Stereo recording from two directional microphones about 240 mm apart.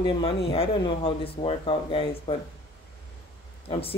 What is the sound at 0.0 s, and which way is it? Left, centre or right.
Speech, left.